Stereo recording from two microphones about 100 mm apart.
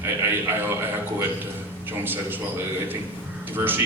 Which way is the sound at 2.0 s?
20° right (ahead or behind).